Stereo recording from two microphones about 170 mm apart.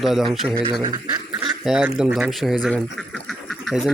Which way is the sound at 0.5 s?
25° right (ahead or behind).